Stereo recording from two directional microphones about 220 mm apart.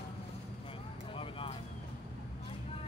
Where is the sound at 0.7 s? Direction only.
25° left (ahead or behind).